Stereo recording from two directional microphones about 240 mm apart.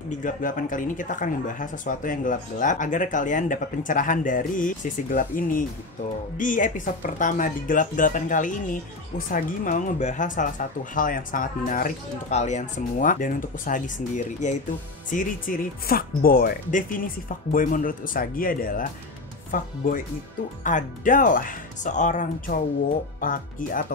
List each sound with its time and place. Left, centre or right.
0.2 s speech: left